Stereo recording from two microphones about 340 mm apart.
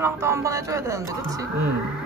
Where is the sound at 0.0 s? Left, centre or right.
Centre.